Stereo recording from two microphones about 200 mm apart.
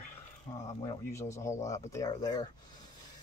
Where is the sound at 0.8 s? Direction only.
15° left (ahead or behind).